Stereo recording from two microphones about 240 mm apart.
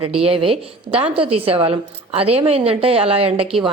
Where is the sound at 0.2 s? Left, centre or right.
Right.